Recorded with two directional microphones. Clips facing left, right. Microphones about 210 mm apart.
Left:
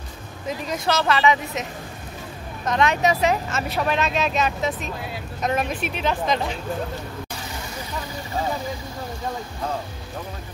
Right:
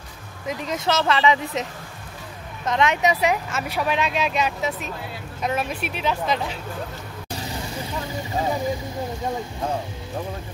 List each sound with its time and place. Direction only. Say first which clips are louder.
0.5 s speech: even; 20° right (ahead or behind); by 6.6 s 5° right (ahead or behind)